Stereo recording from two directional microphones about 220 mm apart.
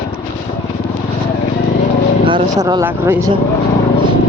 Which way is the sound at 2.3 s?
20° right (ahead or behind).